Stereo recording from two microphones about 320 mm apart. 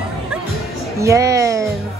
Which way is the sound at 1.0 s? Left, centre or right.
Centre.